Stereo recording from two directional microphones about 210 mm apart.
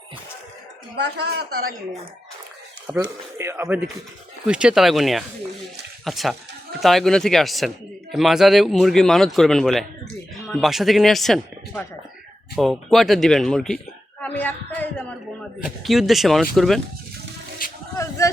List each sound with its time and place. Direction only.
0.9 s speech: 50° right (ahead or behind)
2.8 s a man's voice: 10° right (ahead or behind)
14.2 s a sound: 5° left (ahead or behind)
15.6 s a man's voice: centre (ahead or behind)